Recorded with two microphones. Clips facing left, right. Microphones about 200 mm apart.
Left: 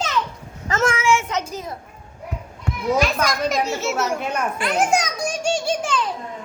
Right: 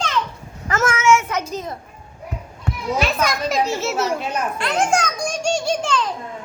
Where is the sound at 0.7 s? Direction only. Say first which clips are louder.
Right 2 dB; 30° left (ahead or behind).